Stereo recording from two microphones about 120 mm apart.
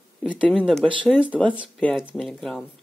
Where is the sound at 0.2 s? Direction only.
10° left (ahead or behind).